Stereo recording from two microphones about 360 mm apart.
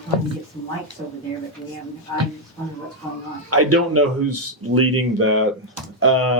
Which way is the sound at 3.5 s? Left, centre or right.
Right.